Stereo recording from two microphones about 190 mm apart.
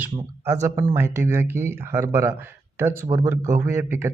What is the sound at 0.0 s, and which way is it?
A man's voice, 15° right (ahead or behind).